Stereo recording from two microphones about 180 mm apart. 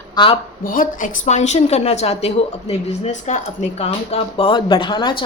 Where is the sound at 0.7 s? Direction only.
50° left (ahead or behind).